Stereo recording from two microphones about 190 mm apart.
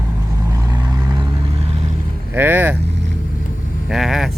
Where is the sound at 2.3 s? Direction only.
10° right (ahead or behind).